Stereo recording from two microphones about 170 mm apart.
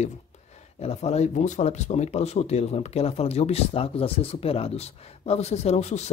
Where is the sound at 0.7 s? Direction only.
40° left (ahead or behind).